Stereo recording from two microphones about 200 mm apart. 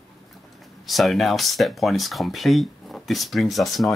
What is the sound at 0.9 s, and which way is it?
Speech, centre (ahead or behind).